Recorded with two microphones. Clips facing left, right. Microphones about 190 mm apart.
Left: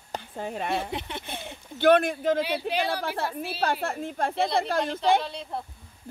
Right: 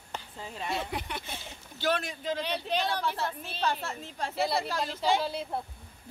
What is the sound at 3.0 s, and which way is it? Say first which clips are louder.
A woman's voice: left 3 dB; 55° left (ahead or behind).